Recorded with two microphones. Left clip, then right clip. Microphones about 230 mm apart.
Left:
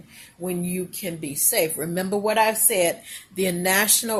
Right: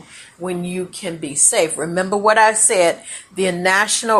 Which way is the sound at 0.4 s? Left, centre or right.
Centre.